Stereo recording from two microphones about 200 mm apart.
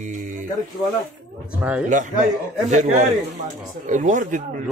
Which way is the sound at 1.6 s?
5° right (ahead or behind).